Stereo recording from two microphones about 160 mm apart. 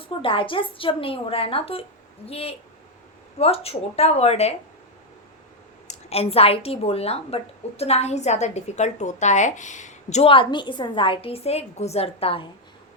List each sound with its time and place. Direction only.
0.0 s a woman's voice: 35° left (ahead or behind)
5.9 s a woman's voice: 40° left (ahead or behind)